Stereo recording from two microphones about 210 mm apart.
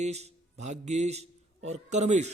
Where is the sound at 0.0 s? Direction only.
30° right (ahead or behind).